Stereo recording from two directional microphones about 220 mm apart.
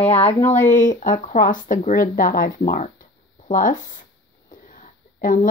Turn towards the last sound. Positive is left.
turn(degrees=40)  # may be behind; listen again after turning